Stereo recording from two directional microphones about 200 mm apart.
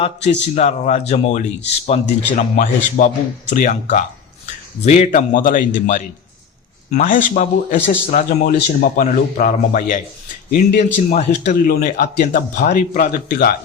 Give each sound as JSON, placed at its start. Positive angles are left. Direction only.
{"t": 0.0, "sound": "a man's voice", "side_deg": 35}